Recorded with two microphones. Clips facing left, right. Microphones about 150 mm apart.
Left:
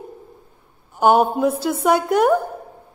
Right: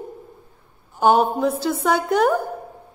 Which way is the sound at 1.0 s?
5° left (ahead or behind).